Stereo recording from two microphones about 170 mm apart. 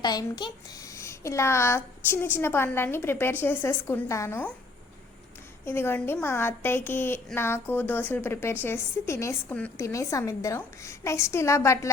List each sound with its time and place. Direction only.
0.0 s a child's voice: 25° left (ahead or behind)
5.6 s a woman's voice: 15° left (ahead or behind)